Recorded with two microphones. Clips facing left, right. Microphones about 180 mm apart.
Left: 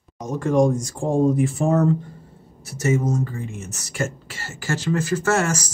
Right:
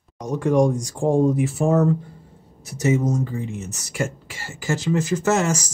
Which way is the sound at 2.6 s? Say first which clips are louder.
Right 1 dB; 15° right (ahead or behind).